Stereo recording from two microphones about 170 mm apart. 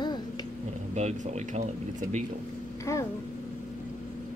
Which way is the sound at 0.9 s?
40° right (ahead or behind).